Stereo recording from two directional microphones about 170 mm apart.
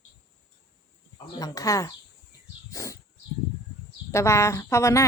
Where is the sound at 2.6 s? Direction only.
20° left (ahead or behind).